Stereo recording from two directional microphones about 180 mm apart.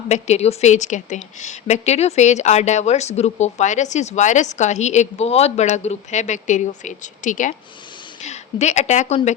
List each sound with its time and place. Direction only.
0.1 s a woman's voice: 35° left (ahead or behind)